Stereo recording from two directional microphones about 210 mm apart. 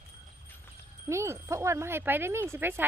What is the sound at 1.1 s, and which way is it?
Speech, 15° right (ahead or behind).